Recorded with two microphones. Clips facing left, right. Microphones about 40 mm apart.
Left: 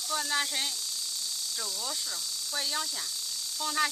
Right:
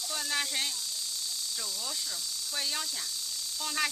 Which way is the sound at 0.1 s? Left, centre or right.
Centre.